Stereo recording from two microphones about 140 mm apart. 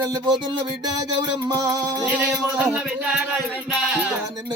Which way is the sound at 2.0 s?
10° right (ahead or behind).